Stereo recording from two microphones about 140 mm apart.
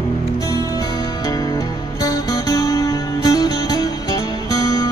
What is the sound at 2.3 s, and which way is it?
Music, 25° left (ahead or behind).